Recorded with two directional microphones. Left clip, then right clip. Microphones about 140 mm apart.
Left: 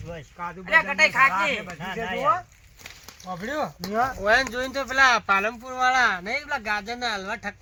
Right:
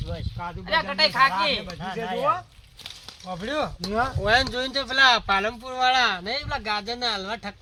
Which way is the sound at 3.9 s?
80° right.